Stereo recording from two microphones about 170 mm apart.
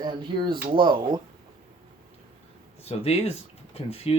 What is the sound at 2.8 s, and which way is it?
Speech, 35° left (ahead or behind).